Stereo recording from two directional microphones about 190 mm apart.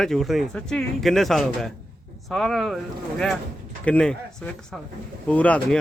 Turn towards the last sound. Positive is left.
turn(degrees=5)  # may be behind; listen again after turning